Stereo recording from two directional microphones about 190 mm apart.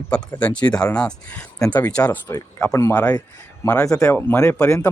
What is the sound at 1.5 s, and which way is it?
Speech, 15° left (ahead or behind).